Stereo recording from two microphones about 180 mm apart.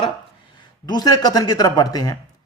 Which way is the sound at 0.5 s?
20° left (ahead or behind).